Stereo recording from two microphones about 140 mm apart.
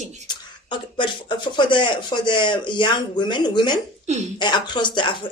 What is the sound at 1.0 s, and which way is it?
Speech, 35° left (ahead or behind).